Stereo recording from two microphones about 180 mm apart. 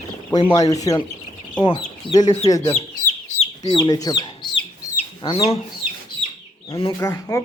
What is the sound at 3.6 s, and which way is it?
Speech, 25° left (ahead or behind).